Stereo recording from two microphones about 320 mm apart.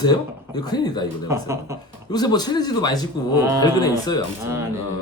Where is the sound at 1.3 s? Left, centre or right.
Centre.